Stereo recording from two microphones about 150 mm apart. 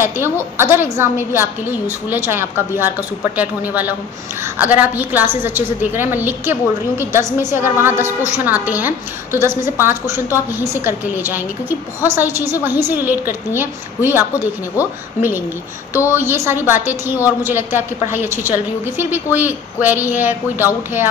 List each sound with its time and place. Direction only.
0.0 s a woman's voice: 15° right (ahead or behind)
15.9 s a woman's voice: 15° right (ahead or behind)